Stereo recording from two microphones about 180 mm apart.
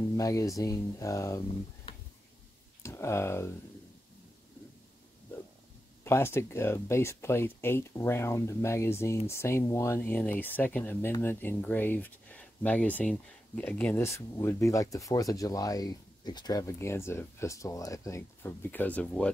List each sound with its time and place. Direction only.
0.2 s speech: 20° left (ahead or behind)
2.8 s speech: 15° left (ahead or behind)
6.0 s speech: 15° left (ahead or behind)